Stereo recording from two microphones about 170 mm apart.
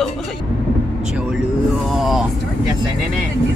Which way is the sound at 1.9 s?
Centre (ahead or behind).